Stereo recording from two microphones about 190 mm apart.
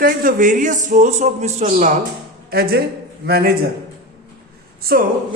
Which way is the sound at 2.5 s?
55° right (ahead or behind).